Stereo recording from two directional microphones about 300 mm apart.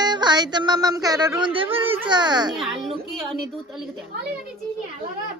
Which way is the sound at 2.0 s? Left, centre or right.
Centre.